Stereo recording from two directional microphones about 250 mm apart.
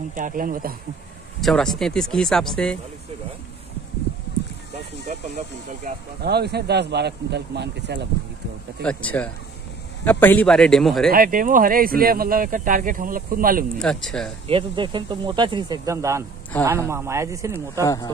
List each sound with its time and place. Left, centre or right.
0.1 s speech: right
1.4 s speech: centre
5.0 s speech: right
8.8 s speech: centre
11.1 s speech: right
13.7 s speech: centre
14.5 s speech: centre
17.8 s speech: centre